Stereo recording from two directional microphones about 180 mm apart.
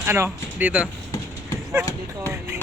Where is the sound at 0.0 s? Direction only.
15° right (ahead or behind).